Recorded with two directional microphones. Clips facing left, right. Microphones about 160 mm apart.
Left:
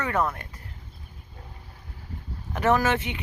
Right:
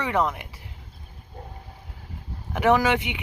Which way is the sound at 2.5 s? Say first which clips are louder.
Right 2 dB; 15° right (ahead or behind).